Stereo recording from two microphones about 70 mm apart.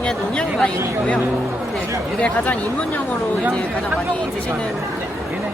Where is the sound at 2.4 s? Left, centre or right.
Left.